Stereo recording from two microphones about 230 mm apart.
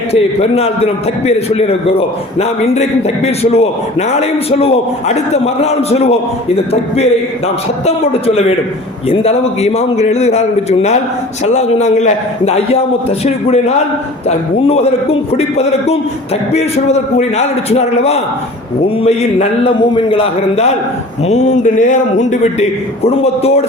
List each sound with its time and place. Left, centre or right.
0.1 s a man's voice: left
21.2 s a sound: left
23.0 s a man's voice: left